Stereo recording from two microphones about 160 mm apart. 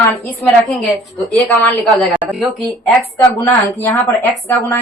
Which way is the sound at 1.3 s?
10° left (ahead or behind).